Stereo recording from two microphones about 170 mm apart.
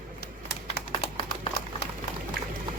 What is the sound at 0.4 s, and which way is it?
Typing, 70° left (ahead or behind).